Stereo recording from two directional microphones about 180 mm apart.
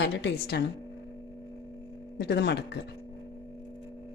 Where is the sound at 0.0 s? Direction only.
75° left (ahead or behind).